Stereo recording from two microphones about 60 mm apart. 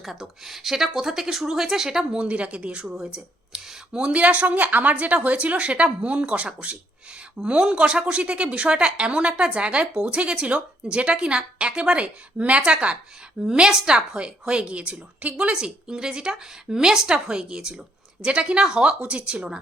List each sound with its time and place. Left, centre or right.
0.0 s speech: centre; by 15.5 s right
15.5 s speech: centre